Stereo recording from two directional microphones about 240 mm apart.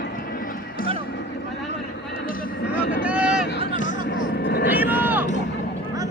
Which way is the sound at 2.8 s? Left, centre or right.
Left.